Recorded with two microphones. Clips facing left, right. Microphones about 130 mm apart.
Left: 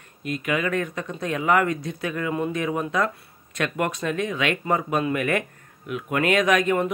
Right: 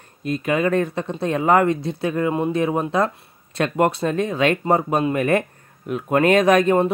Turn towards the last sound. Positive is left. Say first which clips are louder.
# right 5 dB
turn(degrees=-35)  # may be behind; listen again after turning